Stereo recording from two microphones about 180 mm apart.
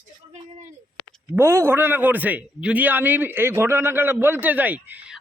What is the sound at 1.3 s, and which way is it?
Speech, 15° right (ahead or behind).